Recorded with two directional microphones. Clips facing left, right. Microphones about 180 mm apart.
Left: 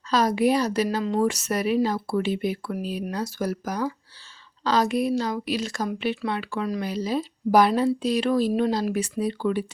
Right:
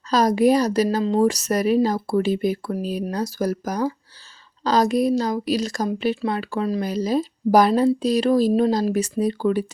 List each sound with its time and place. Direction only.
0.1 s a woman's voice: 40° right (ahead or behind)